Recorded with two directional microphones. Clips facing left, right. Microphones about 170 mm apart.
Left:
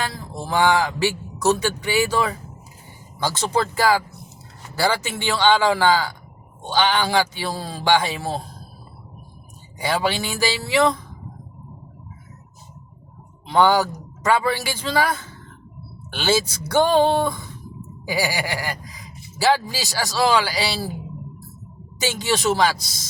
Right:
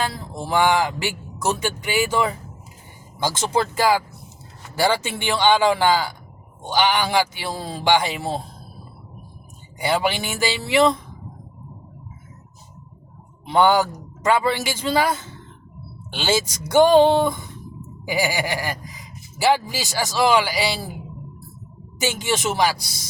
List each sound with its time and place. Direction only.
0.4 s a man's voice: 20° right (ahead or behind)
5.2 s a man's voice: 15° right (ahead or behind)
9.8 s a man's voice: 20° right (ahead or behind)
13.5 s a man's voice: 20° right (ahead or behind)
22.0 s speech: 20° right (ahead or behind)